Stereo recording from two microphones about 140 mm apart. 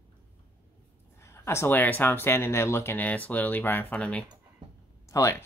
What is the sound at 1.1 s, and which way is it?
Speech, 20° left (ahead or behind).